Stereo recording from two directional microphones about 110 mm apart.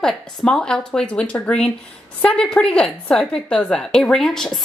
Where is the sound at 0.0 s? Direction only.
5° left (ahead or behind).